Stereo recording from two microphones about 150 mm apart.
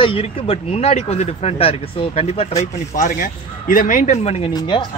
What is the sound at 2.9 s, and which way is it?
Speech, 65° left (ahead or behind).